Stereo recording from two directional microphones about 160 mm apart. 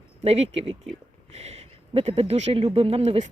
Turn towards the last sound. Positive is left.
turn(degrees=-40)  # may be behind; listen again after turning